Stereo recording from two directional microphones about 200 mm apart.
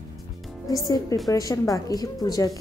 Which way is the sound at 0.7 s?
15° left (ahead or behind).